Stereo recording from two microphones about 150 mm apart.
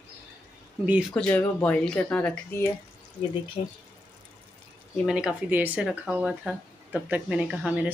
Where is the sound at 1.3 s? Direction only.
10° left (ahead or behind).